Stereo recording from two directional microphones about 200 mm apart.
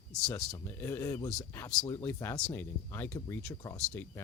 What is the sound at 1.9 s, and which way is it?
Speech, 15° left (ahead or behind).